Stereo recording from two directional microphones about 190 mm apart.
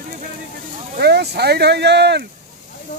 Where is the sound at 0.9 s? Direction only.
60° right (ahead or behind).